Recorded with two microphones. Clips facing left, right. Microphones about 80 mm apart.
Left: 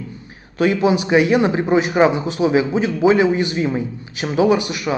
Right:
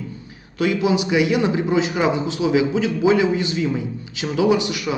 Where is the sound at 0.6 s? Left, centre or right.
Left.